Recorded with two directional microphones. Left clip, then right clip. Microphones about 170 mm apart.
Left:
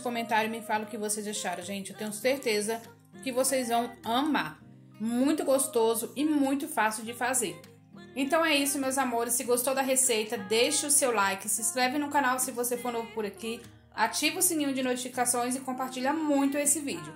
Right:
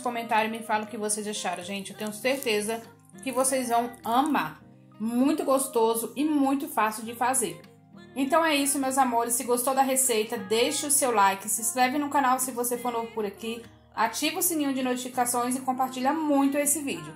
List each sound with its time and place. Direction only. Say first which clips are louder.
0.0 s a woman's voice: right 3 dB; 25° left (ahead or behind); by 17.1 s centre (ahead or behind)